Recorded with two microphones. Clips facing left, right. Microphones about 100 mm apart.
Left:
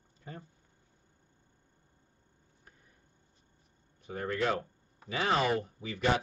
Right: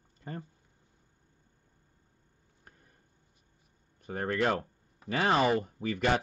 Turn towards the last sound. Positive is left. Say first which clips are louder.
# right 4 dB
turn(degrees=-55)  # may be behind; listen again after turning